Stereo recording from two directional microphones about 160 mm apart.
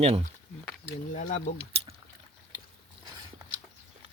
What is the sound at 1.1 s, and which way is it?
Speech, 50° left (ahead or behind).